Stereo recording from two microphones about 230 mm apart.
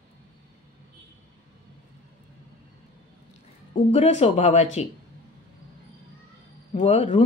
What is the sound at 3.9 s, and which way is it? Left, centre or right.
Speech, left.